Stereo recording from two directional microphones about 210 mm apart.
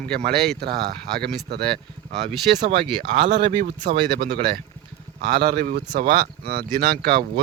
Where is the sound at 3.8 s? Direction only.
45° right (ahead or behind).